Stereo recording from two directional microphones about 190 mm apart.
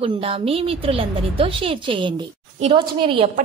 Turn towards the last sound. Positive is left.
turn(degrees=-30)  # may be behind; listen again after turning